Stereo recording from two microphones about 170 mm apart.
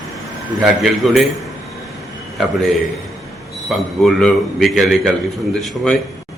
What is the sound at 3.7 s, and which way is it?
A man's voice, centre (ahead or behind).